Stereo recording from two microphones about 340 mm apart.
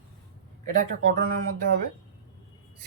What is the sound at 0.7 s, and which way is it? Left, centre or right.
Speech, right.